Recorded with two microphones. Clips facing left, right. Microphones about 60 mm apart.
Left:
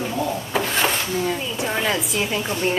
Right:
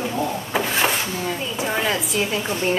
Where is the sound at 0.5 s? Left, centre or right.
Centre.